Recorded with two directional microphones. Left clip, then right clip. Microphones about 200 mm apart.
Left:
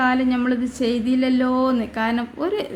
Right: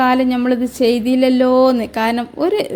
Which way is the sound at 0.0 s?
35° right (ahead or behind).